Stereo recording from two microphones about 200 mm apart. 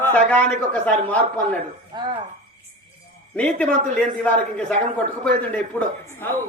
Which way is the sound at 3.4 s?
5° left (ahead or behind).